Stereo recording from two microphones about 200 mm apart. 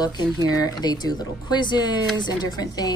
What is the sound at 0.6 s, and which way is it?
A woman's voice, 20° left (ahead or behind).